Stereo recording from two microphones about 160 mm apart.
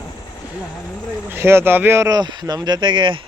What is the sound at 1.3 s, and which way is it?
Speech, 15° right (ahead or behind).